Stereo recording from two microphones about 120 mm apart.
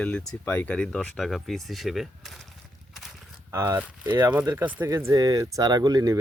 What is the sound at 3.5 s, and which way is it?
Speech, 25° right (ahead or behind).